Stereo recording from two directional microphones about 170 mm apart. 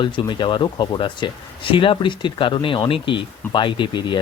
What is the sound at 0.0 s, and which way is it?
Speech, 25° left (ahead or behind).